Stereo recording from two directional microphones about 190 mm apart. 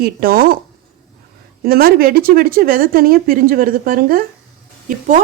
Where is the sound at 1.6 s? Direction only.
55° right (ahead or behind).